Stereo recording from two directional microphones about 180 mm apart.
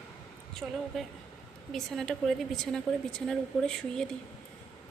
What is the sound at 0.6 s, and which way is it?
Speech, 5° right (ahead or behind).